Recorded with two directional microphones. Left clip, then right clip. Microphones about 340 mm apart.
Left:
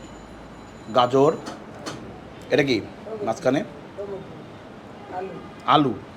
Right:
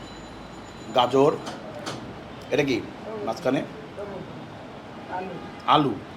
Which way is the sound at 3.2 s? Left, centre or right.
Left.